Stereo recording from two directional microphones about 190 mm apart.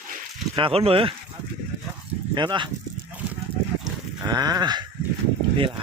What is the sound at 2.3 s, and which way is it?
Speech, 25° right (ahead or behind).